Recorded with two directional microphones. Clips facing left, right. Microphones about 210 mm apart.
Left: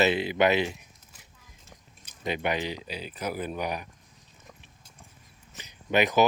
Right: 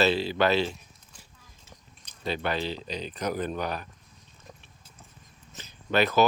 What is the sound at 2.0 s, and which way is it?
Speech, 15° left (ahead or behind).